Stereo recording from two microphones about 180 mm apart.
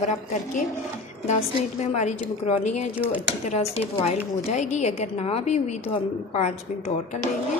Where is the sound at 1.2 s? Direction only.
40° left (ahead or behind).